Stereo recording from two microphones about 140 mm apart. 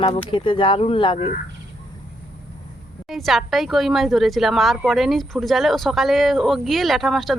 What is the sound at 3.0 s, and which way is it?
A woman's voice, centre (ahead or behind).